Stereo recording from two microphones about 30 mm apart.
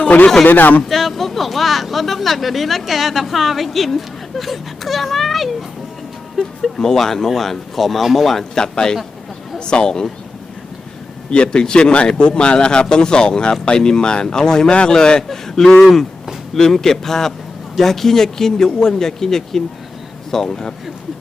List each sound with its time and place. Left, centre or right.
0.0 s a sound: left
0.4 s speech: left
0.9 s speech: centre
6.7 s a man's voice: centre
8.5 s speech: left
11.3 s speech: left
15.3 s speech: centre